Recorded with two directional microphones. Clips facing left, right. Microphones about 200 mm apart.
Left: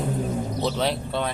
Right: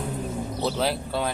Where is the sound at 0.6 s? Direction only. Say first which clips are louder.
Right 1 dB; 5° right (ahead or behind).